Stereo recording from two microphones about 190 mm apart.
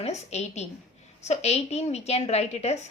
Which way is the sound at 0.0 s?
35° left (ahead or behind).